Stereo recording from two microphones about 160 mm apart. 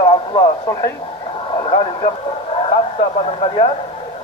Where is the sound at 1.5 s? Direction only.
30° left (ahead or behind).